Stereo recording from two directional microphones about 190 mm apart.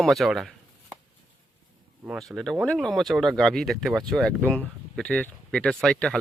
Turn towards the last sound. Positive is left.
turn(degrees=5)  # may be behind; listen again after turning